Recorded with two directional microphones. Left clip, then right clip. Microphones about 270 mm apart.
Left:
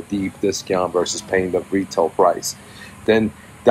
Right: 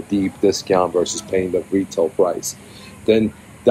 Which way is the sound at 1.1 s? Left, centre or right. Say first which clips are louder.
Even; centre.